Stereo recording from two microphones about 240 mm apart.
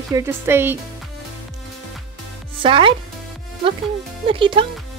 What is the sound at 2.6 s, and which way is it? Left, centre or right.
Speech, right.